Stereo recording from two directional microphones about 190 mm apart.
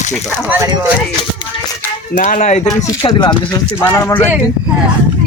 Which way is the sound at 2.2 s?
40° left (ahead or behind).